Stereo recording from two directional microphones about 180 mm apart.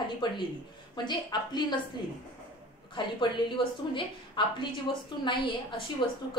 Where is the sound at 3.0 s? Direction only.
25° left (ahead or behind).